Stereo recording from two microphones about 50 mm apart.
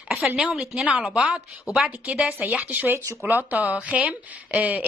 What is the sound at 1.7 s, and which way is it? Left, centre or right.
Speech, left.